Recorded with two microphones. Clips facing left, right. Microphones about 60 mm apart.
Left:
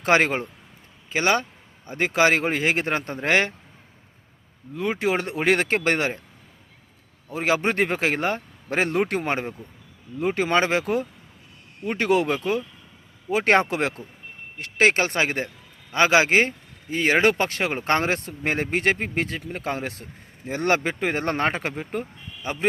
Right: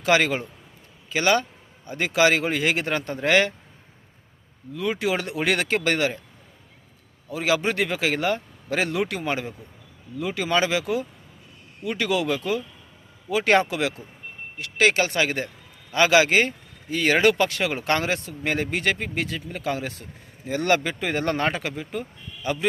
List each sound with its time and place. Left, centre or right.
0.0 s speech: left
1.1 s speech: left
4.7 s speech: left
7.3 s speech: left